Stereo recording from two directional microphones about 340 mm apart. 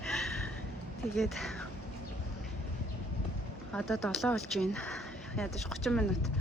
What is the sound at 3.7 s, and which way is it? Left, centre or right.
Speech, centre.